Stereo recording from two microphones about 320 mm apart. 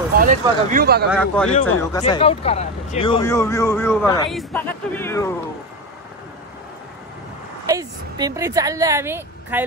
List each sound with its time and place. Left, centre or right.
0.2 s speech: right
1.1 s speech: centre
1.9 s speech: centre
7.6 s a woman's voice: centre